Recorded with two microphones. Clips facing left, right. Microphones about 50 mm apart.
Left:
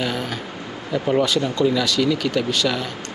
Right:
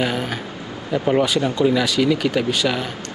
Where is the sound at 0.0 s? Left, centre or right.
Centre.